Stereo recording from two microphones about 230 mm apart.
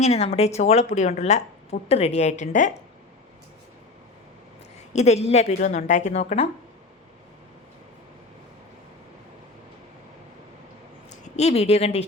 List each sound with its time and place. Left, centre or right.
0.0 s a woman's voice: left
4.9 s a woman's voice: left
11.3 s a woman's voice: left